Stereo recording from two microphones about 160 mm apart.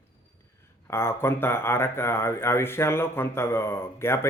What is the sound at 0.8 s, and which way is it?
A man's voice, 15° left (ahead or behind).